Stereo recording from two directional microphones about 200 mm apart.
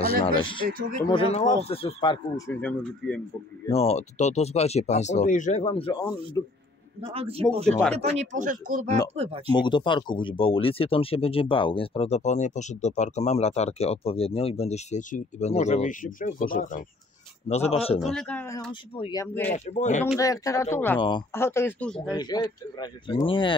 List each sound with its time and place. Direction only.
0.0 s speech: 25° left (ahead or behind)
0.7 s speech: 45° right (ahead or behind)
1.0 s speech: 30° left (ahead or behind); by 3.2 s 5° left (ahead or behind)
3.7 s speech: 30° left (ahead or behind)
6.4 s speech: 15° left (ahead or behind)
7.0 s a man's voice: 30° right (ahead or behind)
9.1 s a man's voice: 30° right (ahead or behind)
9.5 s speech: 20° left (ahead or behind)
18.0 s speech: 5° left (ahead or behind)
18.7 s speech: 25° left (ahead or behind)
19.2 s speech: 10° left (ahead or behind)
19.5 s speech: 35° left (ahead or behind)
20.2 s speech: 15° left (ahead or behind)
22.1 s speech: 20° left (ahead or behind)